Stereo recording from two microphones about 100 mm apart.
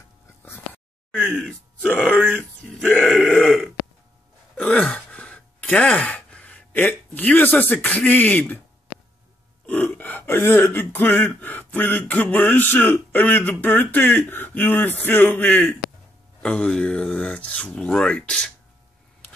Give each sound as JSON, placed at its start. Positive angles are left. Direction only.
{"t": 1.3, "sound": "speech", "side_deg": 5}
{"t": 2.7, "sound": "grunt", "side_deg": 5}
{"t": 3.2, "sound": "burping", "side_deg": 0}
{"t": 4.6, "sound": "sigh", "side_deg": 10}
{"t": 9.7, "sound": "speech", "side_deg": 15}